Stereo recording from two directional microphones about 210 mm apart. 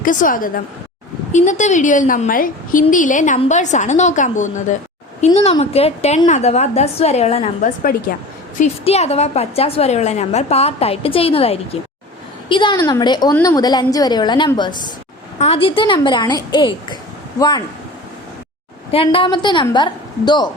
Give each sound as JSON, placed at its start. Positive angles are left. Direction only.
{"t": 0.0, "sound": "a woman's voice", "side_deg": 40}
{"t": 7.9, "sound": "a woman's voice", "side_deg": 45}
{"t": 8.5, "sound": "a woman's voice", "side_deg": 30}
{"t": 18.9, "sound": "a woman's voice", "side_deg": 25}